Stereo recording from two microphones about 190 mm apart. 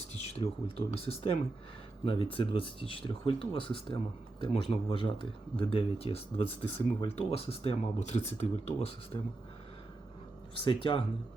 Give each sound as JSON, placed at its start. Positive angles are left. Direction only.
{"t": 0.2, "sound": "speech", "side_deg": 30}
{"t": 10.6, "sound": "speech", "side_deg": 25}